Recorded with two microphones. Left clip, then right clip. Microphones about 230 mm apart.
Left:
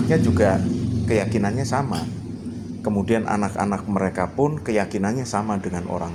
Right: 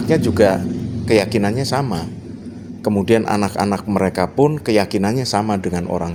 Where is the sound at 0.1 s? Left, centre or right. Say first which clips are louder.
Right 6 dB; right.